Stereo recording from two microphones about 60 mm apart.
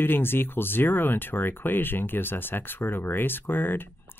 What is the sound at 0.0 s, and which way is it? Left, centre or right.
Speech, left.